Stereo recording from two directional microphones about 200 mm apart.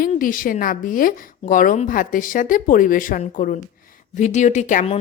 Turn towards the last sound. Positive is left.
turn(degrees=35)  # may be behind; listen again after turning